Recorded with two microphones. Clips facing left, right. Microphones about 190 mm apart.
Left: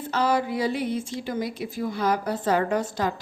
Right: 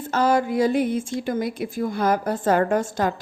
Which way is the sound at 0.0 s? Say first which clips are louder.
Right 3 dB; 50° right (ahead or behind).